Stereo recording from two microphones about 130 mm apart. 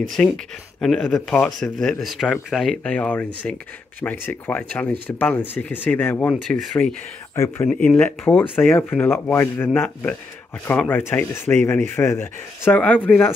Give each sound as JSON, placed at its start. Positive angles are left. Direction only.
{"t": 0.2, "sound": "speech", "side_deg": 10}
{"t": 7.3, "sound": "speech", "side_deg": 20}
{"t": 7.6, "sound": "speech", "side_deg": 10}